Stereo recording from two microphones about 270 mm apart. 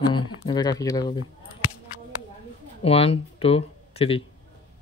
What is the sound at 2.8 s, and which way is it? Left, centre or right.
Speech, left.